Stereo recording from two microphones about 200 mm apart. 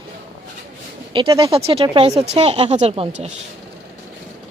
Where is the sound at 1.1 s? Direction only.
20° right (ahead or behind).